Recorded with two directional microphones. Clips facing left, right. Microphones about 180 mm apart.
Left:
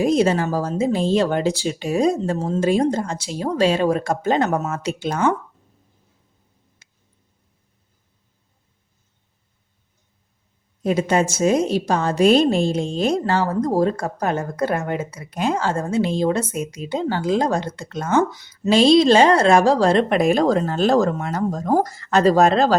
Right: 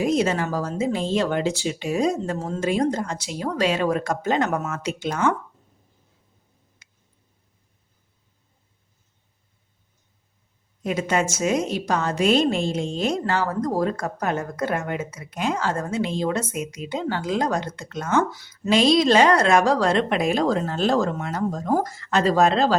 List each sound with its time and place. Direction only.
0.0 s a woman's voice: 30° left (ahead or behind)
6.8 s a sound: 30° left (ahead or behind)
10.8 s a woman's voice: 35° left (ahead or behind)
18.3 s speech: 20° left (ahead or behind)
18.7 s a woman's voice: 30° left (ahead or behind); by 22.7 s 45° left (ahead or behind)